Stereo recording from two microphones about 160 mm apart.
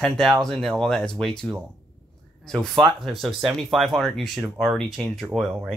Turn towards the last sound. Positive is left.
turn(degrees=0)  # may be behind; listen again after turning